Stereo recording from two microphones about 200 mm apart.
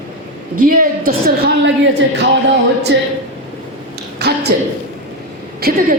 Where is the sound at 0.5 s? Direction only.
45° right (ahead or behind).